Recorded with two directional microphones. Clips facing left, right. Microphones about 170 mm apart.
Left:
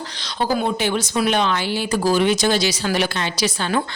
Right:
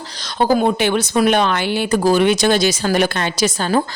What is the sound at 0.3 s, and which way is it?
Speech, 50° right (ahead or behind).